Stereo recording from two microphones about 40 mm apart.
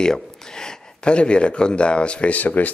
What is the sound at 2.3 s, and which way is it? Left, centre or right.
Speech, left.